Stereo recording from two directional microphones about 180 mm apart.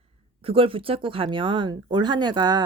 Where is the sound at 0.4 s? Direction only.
30° right (ahead or behind).